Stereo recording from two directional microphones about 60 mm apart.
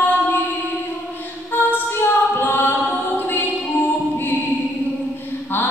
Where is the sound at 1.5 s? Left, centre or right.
Left.